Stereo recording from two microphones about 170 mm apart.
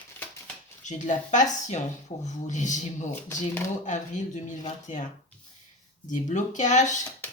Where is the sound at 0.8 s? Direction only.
45° left (ahead or behind).